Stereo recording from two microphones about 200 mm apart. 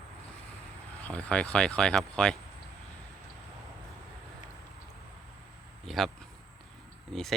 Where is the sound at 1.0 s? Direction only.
5° left (ahead or behind).